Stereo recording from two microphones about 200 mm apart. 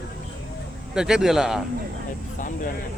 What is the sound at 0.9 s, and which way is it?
Speech, 5° right (ahead or behind).